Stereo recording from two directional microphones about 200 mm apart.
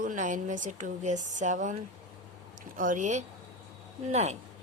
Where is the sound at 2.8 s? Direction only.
40° right (ahead or behind).